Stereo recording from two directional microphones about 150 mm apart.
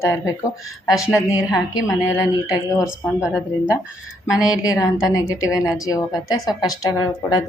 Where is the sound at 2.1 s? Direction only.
20° left (ahead or behind).